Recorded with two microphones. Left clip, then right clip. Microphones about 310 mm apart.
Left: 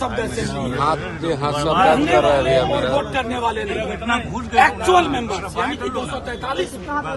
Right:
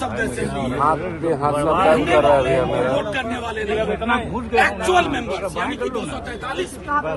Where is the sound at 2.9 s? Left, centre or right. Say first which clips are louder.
Left 2 dB; centre.